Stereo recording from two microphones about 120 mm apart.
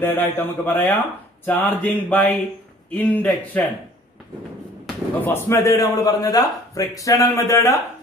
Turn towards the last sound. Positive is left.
turn(degrees=25)  # may be behind; listen again after turning